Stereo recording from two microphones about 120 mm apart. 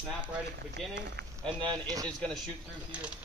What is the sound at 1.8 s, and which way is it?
Speech, 30° right (ahead or behind).